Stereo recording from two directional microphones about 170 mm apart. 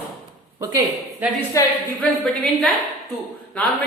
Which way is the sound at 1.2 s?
10° right (ahead or behind).